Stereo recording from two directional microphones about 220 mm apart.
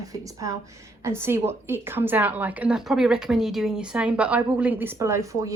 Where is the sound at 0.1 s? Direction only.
15° right (ahead or behind).